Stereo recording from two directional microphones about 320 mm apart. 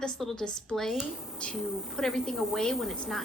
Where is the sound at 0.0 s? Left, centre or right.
Centre.